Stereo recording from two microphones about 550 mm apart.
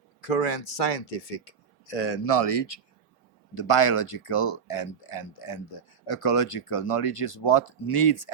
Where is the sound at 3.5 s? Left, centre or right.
Left.